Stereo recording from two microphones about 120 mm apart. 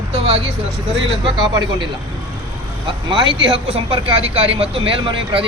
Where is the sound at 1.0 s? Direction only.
40° right (ahead or behind).